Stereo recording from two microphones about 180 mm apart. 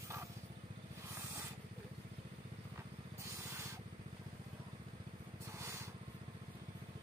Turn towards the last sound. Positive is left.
turn(degrees=-15)  # may be behind; listen again after turning